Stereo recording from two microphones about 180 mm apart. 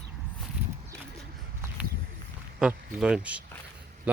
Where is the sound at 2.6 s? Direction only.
5° right (ahead or behind).